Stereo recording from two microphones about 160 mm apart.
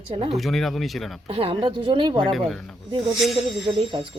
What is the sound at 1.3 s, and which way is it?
Speech, 35° right (ahead or behind).